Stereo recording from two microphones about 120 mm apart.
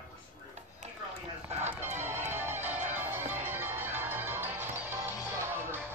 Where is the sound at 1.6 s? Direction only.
75° right (ahead or behind).